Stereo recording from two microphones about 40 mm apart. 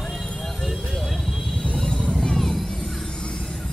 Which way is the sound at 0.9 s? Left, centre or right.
Centre.